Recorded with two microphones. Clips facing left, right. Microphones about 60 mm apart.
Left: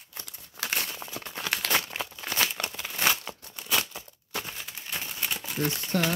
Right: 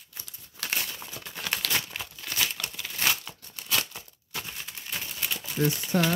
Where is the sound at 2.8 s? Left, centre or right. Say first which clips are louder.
Left 2 dB; centre.